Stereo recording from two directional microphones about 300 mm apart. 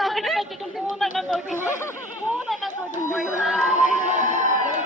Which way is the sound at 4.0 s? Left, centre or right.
Right.